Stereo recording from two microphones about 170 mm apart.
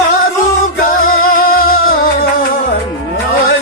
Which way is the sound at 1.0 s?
55° left (ahead or behind).